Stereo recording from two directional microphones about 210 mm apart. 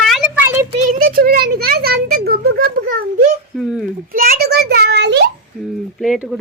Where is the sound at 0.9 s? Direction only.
45° right (ahead or behind).